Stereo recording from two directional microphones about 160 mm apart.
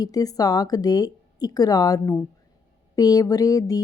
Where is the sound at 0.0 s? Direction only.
25° left (ahead or behind).